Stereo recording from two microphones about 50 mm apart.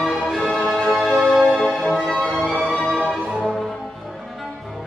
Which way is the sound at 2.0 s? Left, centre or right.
Centre.